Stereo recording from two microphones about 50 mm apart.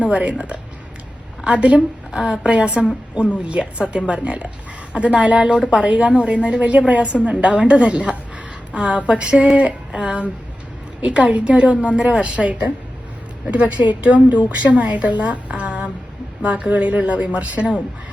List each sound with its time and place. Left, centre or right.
0.0 s a woman's voice: right